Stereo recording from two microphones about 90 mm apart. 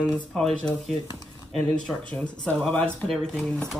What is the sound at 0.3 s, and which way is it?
Speech, 5° left (ahead or behind).